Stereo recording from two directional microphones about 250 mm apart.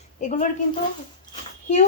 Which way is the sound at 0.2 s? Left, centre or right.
Left.